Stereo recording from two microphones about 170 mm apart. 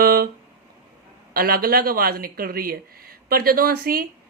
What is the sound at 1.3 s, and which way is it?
Speech, 60° right (ahead or behind).